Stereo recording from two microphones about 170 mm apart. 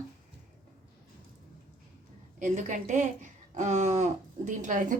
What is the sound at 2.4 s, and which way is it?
A woman's voice, 50° right (ahead or behind).